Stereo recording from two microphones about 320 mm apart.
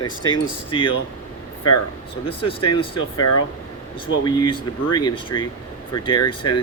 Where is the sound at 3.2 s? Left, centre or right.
Left.